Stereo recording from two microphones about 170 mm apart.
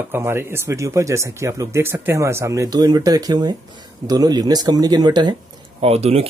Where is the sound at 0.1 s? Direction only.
15° right (ahead or behind).